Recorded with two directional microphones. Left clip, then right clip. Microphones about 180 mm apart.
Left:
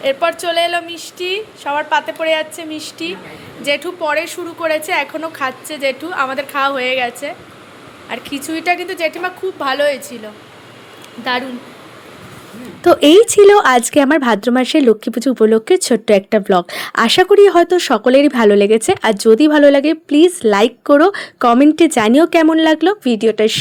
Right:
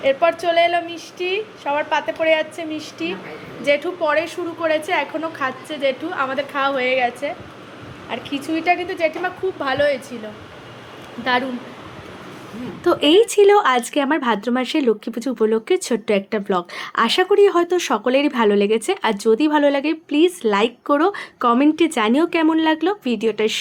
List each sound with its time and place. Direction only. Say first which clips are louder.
0.0 s a woman's voice: left 1 dB; 5° left (ahead or behind)
11.2 s a woman's voice: left 1 dB; 5° left (ahead or behind)
12.8 s speech: left 7 dB; 40° left (ahead or behind)